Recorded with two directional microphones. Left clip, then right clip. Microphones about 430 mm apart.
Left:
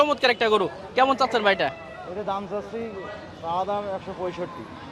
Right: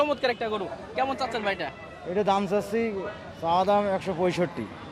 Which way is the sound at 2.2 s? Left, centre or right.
Right.